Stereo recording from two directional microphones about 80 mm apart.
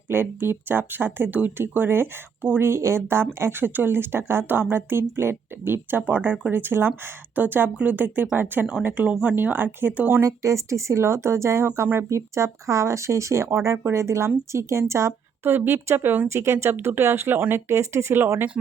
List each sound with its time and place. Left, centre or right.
0.1 s speech: right
10.2 s speech: right
16.3 s speech: right